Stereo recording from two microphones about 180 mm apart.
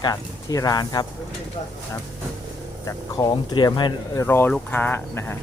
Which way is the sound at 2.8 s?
20° left (ahead or behind).